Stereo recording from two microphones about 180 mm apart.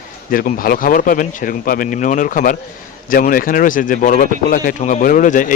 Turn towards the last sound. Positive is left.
turn(degrees=45)  # may be behind; listen again after turning